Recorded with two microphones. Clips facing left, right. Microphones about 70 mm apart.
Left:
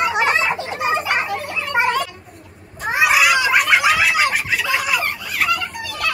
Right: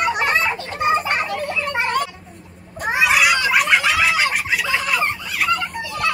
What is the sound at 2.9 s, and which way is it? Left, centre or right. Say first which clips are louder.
Cat: left 1 dB; centre.